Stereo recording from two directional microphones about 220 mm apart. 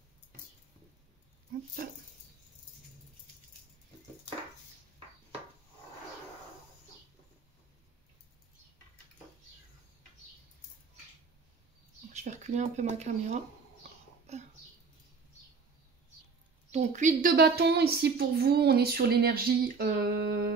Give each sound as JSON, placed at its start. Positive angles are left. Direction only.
{"t": 1.8, "sound": "speech", "side_deg": -40}
{"t": 12.1, "sound": "speech", "side_deg": -30}
{"t": 14.3, "sound": "a sound", "side_deg": -30}
{"t": 16.7, "sound": "speech", "side_deg": -35}